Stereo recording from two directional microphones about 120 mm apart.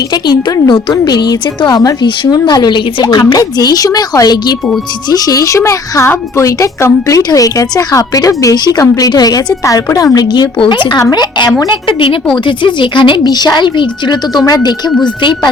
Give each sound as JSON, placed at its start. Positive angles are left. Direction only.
{"t": 0.1, "sound": "a woman's voice", "side_deg": 30}